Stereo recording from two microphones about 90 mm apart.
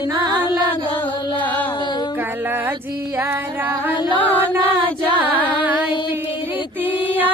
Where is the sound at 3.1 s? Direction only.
20° right (ahead or behind).